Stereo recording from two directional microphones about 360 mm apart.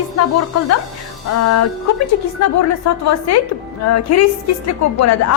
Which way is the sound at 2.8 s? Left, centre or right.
Left.